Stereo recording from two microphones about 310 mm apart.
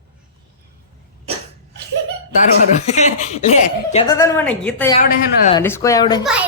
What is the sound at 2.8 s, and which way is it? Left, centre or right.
Speech, left.